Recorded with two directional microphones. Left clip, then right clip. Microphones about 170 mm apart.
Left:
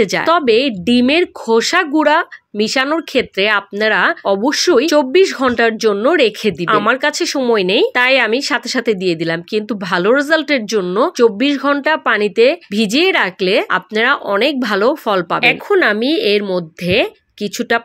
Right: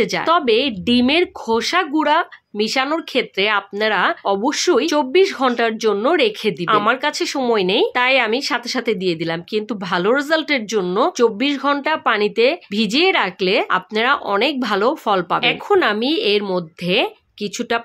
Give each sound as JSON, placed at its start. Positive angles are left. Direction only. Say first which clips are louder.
{"t": 0.0, "sound": "speech", "louder": "left 3 dB", "side_deg": 25}